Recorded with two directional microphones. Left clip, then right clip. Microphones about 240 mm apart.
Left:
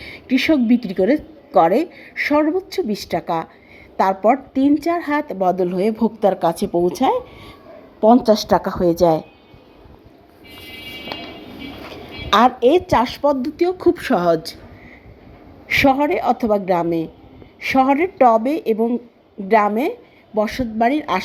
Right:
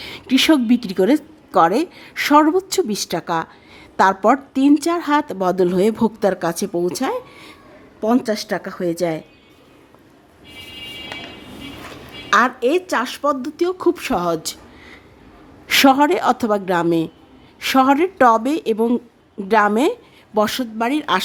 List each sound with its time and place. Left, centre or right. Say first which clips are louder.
0.0 s a woman's voice: right 3 dB; centre
12.3 s speech: left 2 dB; centre
15.6 s a woman's voice: right 2 dB; centre